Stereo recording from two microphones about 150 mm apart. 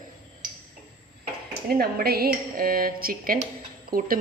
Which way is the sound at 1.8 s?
90° right.